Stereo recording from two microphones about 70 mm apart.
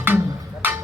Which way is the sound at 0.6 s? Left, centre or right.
Right.